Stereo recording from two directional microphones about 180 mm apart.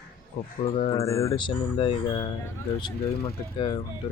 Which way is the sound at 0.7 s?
35° left (ahead or behind).